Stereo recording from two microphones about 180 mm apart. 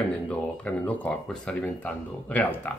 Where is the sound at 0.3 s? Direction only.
10° left (ahead or behind).